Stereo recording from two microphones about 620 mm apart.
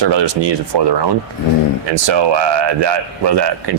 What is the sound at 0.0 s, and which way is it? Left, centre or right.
A man's voice, right.